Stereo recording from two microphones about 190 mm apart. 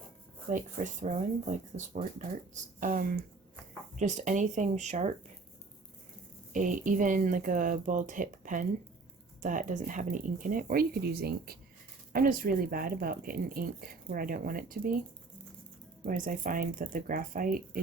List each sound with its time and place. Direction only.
0.5 s a woman's voice: 40° right (ahead or behind)
6.5 s a woman's voice: 45° right (ahead or behind)
16.0 s a woman's voice: 45° right (ahead or behind)